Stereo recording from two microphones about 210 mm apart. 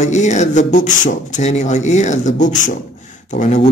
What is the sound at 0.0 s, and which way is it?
Speech, 35° left (ahead or behind).